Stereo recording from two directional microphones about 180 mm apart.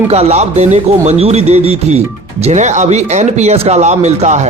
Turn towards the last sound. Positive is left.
turn(degrees=-40)  # may be behind; listen again after turning